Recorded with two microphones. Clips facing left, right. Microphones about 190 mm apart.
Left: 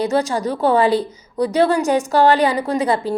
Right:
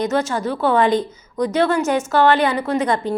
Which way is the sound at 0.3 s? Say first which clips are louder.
Left 2 dB; 35° left (ahead or behind).